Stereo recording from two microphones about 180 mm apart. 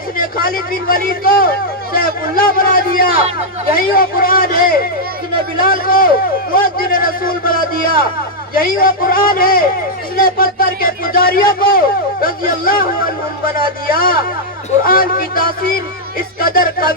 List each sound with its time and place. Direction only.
0.2 s speech: 55° left (ahead or behind)
13.8 s speech: 55° left (ahead or behind)
16.4 s music: 55° left (ahead or behind)